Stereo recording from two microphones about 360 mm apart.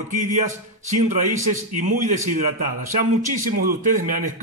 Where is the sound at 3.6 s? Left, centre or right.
Right.